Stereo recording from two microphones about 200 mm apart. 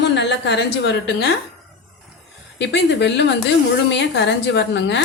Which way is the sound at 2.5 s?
60° left (ahead or behind).